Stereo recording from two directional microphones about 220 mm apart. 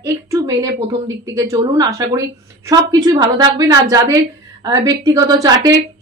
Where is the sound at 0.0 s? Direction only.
15° right (ahead or behind).